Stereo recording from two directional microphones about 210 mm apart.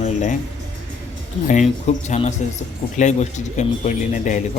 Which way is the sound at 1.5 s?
35° left (ahead or behind).